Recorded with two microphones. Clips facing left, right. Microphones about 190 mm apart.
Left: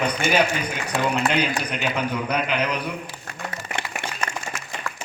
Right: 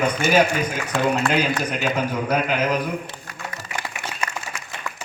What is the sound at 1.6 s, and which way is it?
A man's voice, 45° right (ahead or behind).